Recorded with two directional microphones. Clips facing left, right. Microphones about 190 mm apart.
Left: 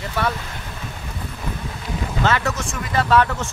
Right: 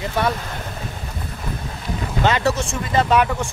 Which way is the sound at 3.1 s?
15° right (ahead or behind).